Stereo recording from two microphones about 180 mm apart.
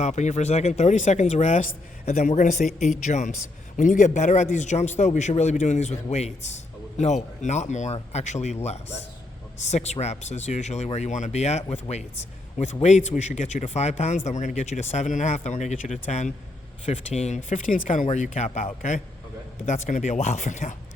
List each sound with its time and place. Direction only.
0.0 s speech: 40° left (ahead or behind)